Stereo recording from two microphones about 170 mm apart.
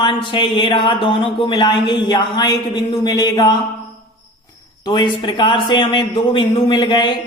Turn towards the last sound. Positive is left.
turn(degrees=25)  # may be behind; listen again after turning